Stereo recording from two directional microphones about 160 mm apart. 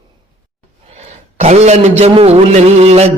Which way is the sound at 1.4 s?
45° right (ahead or behind).